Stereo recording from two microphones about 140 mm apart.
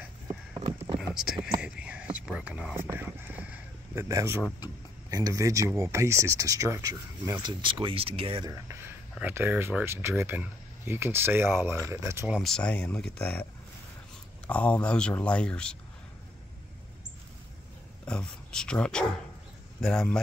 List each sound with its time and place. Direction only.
0.9 s clip-clop: 5° right (ahead or behind)
1.6 s whispering: 10° right (ahead or behind)
5.1 s speech: 25° right (ahead or behind)
7.6 s speech: 40° right (ahead or behind)
8.5 s speech: 20° right (ahead or behind)
12.3 s speech: centre (ahead or behind)
14.5 s speech: 10° left (ahead or behind)
18.0 s speech: 5° left (ahead or behind)